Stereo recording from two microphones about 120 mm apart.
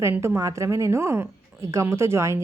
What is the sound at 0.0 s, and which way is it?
Speech, 20° right (ahead or behind).